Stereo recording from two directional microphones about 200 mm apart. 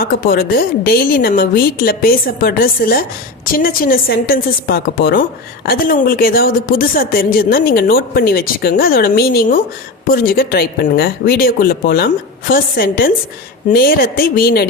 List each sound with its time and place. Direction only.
0.0 s a woman's voice: 45° left (ahead or behind)